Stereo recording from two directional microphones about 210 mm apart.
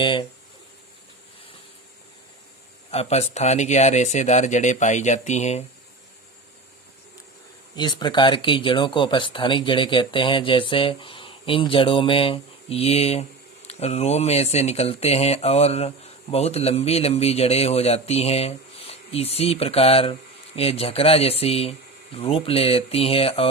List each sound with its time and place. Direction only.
0.0 s speech: 25° left (ahead or behind)
2.9 s speech: 30° left (ahead or behind)
7.8 s speech: 20° left (ahead or behind)